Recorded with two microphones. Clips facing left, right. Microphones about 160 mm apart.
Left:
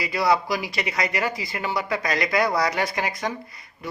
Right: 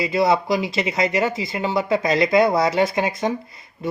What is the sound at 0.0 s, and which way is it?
Speech, 25° right (ahead or behind).